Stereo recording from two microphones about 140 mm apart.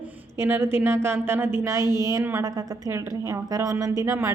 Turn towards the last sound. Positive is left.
turn(degrees=-20)  # may be behind; listen again after turning